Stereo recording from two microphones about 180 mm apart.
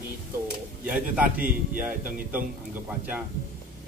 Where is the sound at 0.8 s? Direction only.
10° right (ahead or behind).